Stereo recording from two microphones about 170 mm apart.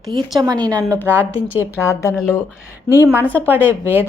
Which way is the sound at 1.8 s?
15° left (ahead or behind).